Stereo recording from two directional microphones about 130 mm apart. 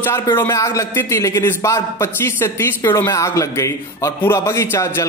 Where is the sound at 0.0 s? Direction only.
20° left (ahead or behind).